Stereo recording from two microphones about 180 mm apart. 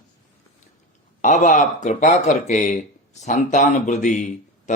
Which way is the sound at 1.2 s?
45° left (ahead or behind).